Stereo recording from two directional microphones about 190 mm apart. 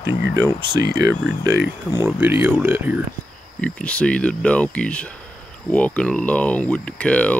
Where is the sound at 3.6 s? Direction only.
5° left (ahead or behind).